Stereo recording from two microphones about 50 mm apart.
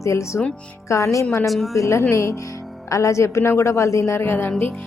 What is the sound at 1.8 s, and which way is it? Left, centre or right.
A woman's voice, left.